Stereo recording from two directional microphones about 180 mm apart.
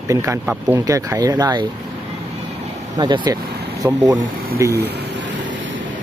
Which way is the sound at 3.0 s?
25° right (ahead or behind).